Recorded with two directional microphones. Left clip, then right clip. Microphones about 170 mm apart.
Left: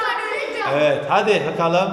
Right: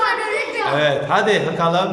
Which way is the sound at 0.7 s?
10° left (ahead or behind).